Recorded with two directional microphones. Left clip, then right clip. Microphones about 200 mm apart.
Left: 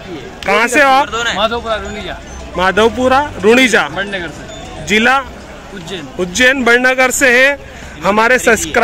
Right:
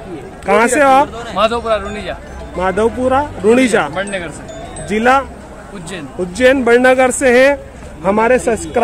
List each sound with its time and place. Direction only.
0.5 s speech: centre (ahead or behind)
1.0 s speech: 15° left (ahead or behind)
2.5 s speech: 5° left (ahead or behind)
3.9 s speech: 15° right (ahead or behind)
4.8 s speech: centre (ahead or behind)
6.3 s speech: centre (ahead or behind)